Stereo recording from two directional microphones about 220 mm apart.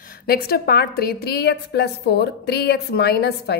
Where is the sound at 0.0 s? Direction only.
40° left (ahead or behind).